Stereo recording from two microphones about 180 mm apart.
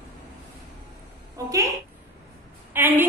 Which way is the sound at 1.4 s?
20° right (ahead or behind).